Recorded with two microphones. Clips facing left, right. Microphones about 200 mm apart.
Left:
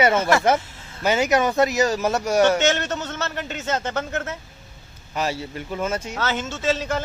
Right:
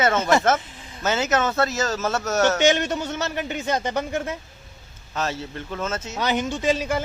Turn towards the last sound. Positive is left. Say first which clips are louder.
# right 1 dB
turn(degrees=-10)  # may be behind; listen again after turning